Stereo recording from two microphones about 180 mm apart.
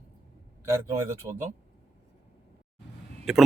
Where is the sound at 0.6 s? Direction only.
15° right (ahead or behind).